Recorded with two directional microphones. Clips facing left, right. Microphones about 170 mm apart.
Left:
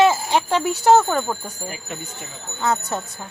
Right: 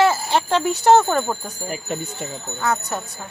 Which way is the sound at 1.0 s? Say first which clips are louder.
Right 1 dB; 10° right (ahead or behind).